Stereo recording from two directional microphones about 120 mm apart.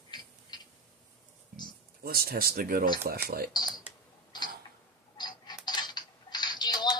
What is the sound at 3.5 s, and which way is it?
Speech, 35° left (ahead or behind).